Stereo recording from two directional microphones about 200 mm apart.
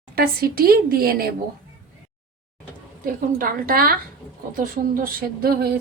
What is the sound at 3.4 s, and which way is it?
A woman's voice, 45° right (ahead or behind).